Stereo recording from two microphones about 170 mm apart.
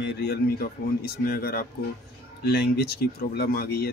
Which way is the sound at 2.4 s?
75° left (ahead or behind).